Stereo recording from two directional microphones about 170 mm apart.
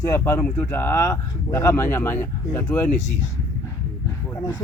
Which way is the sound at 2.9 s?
45° left (ahead or behind).